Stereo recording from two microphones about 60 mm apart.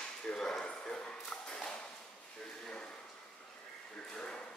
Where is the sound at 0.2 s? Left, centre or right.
Centre.